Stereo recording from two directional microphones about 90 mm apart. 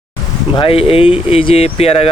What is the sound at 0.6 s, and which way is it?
Speech, 90° left.